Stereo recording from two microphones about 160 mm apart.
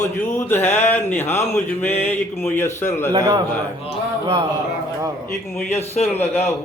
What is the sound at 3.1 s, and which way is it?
Speech, 25° right (ahead or behind).